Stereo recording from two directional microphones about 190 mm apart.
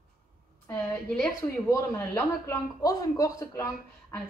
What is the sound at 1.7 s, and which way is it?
Speech, 15° left (ahead or behind).